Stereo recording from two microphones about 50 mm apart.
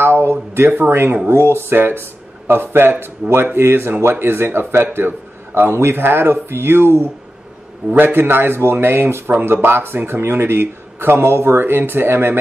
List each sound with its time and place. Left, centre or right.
0.0 s a sound: right
0.7 s speech: right
1.3 s speech: right
8.0 s speech: right